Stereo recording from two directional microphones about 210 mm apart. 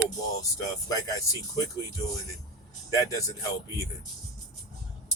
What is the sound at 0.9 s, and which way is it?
Speech, 15° left (ahead or behind).